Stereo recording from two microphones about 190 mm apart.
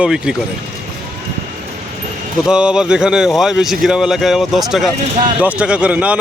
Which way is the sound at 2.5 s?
5° right (ahead or behind).